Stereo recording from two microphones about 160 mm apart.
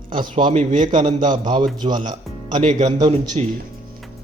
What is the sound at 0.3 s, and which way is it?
Speech, 40° right (ahead or behind).